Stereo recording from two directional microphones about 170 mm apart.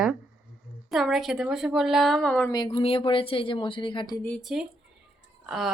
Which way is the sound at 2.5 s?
30° left (ahead or behind).